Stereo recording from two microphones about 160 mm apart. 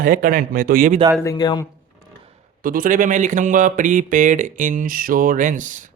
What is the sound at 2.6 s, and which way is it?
Speech, 60° right (ahead or behind).